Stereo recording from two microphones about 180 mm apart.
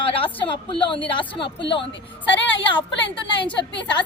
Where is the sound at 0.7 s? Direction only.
30° left (ahead or behind).